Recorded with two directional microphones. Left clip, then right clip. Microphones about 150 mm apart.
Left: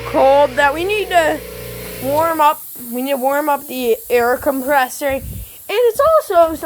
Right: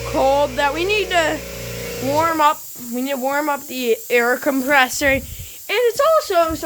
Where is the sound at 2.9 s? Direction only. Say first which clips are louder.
Left 4 dB; 20° left (ahead or behind).